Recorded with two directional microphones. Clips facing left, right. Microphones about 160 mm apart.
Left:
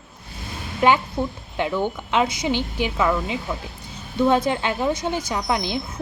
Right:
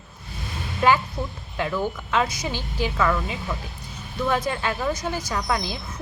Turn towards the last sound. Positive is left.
turn(degrees=20)  # may be behind; listen again after turning